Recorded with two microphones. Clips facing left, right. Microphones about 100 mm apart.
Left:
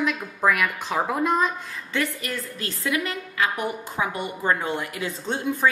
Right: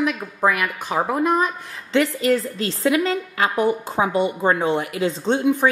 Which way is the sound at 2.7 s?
30° right (ahead or behind).